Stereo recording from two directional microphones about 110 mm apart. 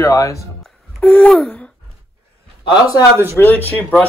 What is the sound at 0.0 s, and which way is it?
Speech, 30° left (ahead or behind).